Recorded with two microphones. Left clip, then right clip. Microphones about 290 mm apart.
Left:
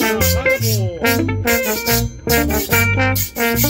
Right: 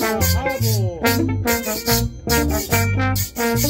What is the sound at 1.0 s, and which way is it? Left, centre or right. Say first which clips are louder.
Music: left 2 dB; left.